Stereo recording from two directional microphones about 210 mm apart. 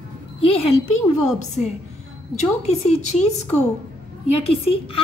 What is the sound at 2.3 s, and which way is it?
Speech, 30° left (ahead or behind).